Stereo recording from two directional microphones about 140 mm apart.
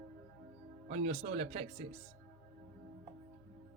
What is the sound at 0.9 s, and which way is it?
Speech, 55° right (ahead or behind).